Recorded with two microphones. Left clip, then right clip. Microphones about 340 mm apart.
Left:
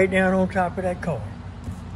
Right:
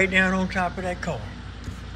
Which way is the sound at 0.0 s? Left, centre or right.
Centre.